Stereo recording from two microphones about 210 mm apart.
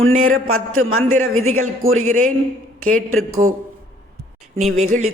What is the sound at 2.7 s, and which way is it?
Speech, 80° right.